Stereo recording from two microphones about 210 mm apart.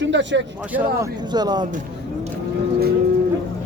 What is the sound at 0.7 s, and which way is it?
Speech, 15° right (ahead or behind).